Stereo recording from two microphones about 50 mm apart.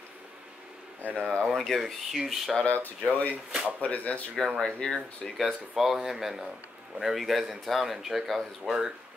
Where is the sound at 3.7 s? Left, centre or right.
Left.